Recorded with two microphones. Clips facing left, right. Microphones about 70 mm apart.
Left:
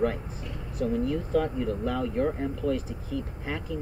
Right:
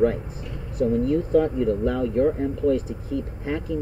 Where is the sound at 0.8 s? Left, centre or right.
Centre.